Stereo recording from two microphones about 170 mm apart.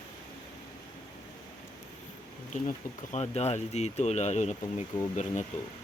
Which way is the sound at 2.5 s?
45° left (ahead or behind).